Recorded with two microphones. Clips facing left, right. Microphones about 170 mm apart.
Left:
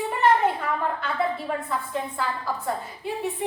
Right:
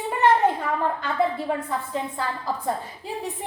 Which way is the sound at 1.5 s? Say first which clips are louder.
Right 2 dB; 35° right (ahead or behind).